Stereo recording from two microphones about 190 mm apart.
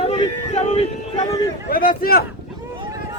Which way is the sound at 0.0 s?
30° left (ahead or behind).